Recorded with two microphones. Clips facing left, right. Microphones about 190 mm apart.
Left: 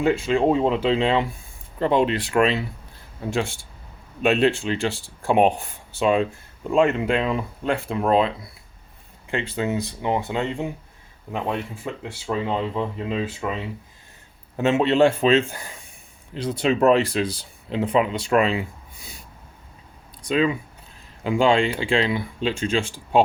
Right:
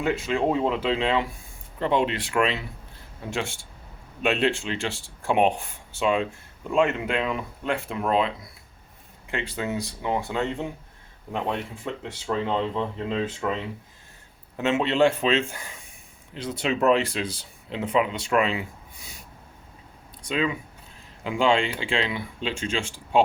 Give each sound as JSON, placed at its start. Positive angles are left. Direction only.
{"t": 0.0, "sound": "speech", "side_deg": 30}
{"t": 9.3, "sound": "speech", "side_deg": 25}
{"t": 14.5, "sound": "speech", "side_deg": 35}
{"t": 20.2, "sound": "speech", "side_deg": 35}